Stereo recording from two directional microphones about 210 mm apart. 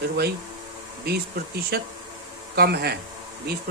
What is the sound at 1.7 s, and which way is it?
Speech, 45° right (ahead or behind).